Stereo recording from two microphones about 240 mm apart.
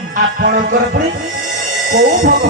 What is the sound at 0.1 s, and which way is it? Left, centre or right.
A man's voice, right.